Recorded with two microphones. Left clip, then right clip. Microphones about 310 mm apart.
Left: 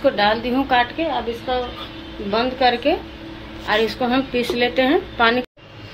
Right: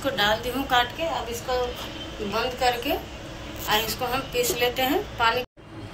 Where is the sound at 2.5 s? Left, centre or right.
Centre.